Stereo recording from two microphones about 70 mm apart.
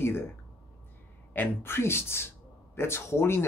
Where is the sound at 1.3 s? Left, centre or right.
Left.